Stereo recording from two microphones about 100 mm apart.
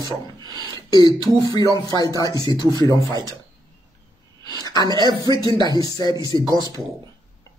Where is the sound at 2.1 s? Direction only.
40° left (ahead or behind).